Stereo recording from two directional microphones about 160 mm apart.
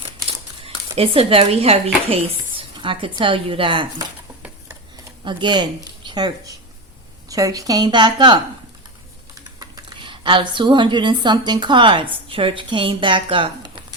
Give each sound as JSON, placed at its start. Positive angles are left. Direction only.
{"t": 0.0, "sound": "crumpling", "side_deg": -35}
{"t": 2.6, "sound": "speech", "side_deg": -30}
{"t": 5.2, "sound": "a woman's voice", "side_deg": -30}
{"t": 9.6, "sound": "speech", "side_deg": -30}